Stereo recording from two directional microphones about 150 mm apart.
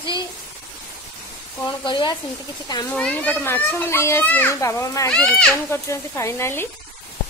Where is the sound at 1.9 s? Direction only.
30° left (ahead or behind).